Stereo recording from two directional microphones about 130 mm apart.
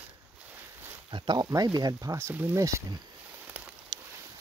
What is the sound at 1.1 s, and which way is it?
Speech, 35° right (ahead or behind).